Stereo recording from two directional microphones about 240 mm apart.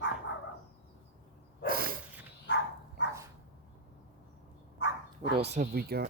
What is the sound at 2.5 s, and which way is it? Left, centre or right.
Dog, left.